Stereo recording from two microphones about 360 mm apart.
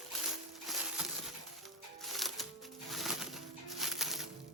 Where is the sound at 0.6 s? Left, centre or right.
Centre.